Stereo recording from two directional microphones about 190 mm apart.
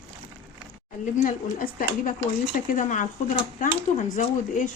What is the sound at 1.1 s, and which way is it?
Speech, 45° left (ahead or behind).